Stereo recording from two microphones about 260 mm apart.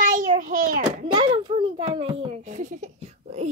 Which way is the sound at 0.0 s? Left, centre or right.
Right.